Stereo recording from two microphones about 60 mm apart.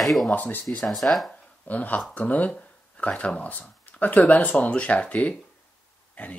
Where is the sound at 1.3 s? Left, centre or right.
Left.